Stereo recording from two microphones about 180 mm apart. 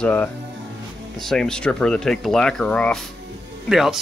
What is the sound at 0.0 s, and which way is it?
Speech, 10° left (ahead or behind).